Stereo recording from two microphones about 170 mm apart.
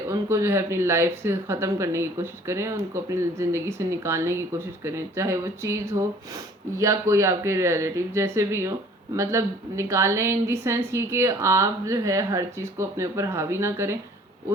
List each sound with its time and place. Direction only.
0.1 s speech: 15° right (ahead or behind)